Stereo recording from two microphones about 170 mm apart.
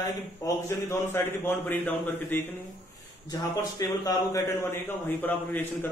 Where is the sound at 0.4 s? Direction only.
20° left (ahead or behind).